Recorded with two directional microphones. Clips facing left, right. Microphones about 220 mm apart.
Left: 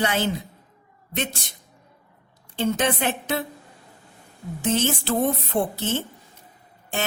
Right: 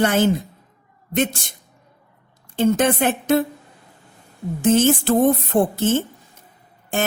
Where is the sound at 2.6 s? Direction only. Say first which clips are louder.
Right 6 dB; 50° right (ahead or behind).